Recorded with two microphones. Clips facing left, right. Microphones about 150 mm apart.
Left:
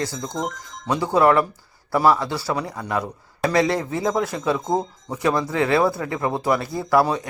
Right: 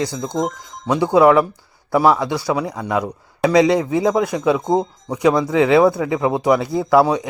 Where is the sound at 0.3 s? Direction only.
20° right (ahead or behind).